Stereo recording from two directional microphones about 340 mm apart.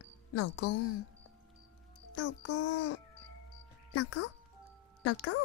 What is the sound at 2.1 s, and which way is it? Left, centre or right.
Speech, left.